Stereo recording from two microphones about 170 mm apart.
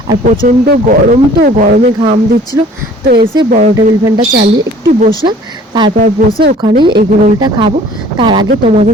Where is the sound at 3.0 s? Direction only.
65° right (ahead or behind).